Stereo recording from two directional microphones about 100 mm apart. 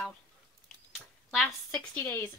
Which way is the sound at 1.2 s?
Centre (ahead or behind).